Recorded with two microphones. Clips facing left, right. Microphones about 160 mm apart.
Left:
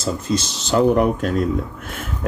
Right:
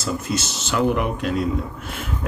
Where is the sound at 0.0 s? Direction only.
30° left (ahead or behind).